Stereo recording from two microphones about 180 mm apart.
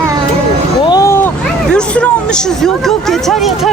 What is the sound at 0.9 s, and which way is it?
Vehicle, 20° left (ahead or behind).